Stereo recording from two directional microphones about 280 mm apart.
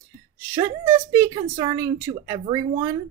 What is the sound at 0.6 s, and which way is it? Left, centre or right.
Speech, centre.